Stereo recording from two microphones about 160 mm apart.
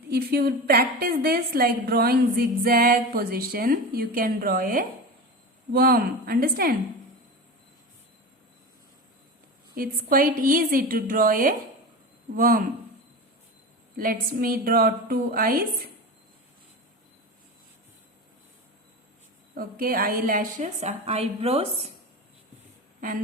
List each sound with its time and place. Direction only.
0.1 s a woman's voice: 80° right
9.7 s a woman's voice: 65° right (ahead or behind)
13.9 s a woman's voice: 65° right (ahead or behind)
19.5 s a woman's voice: 65° right (ahead or behind)
21.0 s a woman's voice: 40° right (ahead or behind)